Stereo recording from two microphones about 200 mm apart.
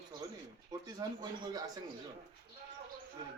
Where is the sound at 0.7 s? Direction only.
20° right (ahead or behind).